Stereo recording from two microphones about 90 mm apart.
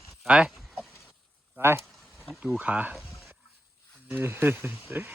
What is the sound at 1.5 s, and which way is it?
Speech, 25° right (ahead or behind).